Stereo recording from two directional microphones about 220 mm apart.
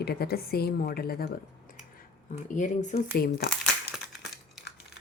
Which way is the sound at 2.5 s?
35° left (ahead or behind).